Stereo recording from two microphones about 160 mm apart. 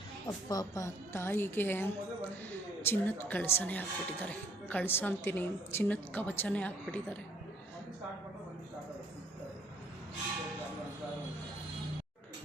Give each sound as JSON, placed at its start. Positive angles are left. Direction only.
{"t": 0.3, "sound": "speech", "side_deg": 25}